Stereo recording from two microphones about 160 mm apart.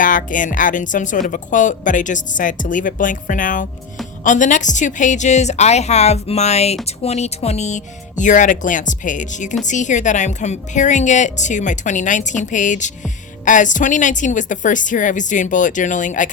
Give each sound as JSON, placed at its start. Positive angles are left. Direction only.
{"t": 0.0, "sound": "a woman's voice", "side_deg": 55}